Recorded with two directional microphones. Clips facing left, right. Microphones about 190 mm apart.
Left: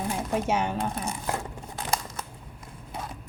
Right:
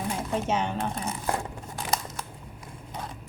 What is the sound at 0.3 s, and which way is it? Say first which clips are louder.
Speech: left 1 dB; 10° left (ahead or behind).